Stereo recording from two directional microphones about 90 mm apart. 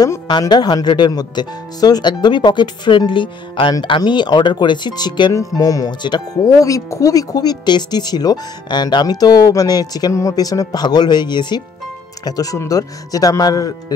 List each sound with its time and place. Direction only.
0.3 s speech: 50° left (ahead or behind)
5.3 s speech: 40° left (ahead or behind)
6.6 s speech: 40° left (ahead or behind); by 11.6 s 55° left (ahead or behind)
12.3 s speech: 40° left (ahead or behind)